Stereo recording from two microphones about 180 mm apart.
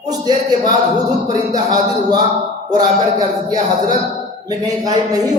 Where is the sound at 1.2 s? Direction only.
20° right (ahead or behind).